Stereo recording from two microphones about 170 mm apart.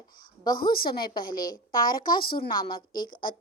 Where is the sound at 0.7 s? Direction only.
60° left (ahead or behind).